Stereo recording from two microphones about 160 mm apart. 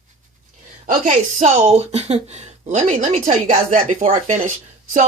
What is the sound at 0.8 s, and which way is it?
A woman's voice, 55° right (ahead or behind).